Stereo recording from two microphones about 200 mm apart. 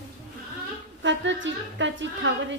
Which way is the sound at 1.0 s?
65° right (ahead or behind).